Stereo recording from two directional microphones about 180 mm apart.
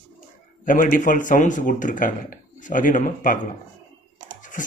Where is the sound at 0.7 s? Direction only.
50° left (ahead or behind).